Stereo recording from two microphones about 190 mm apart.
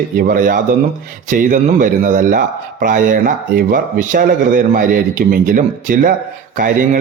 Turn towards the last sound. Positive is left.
turn(degrees=-45)  # may be behind; listen again after turning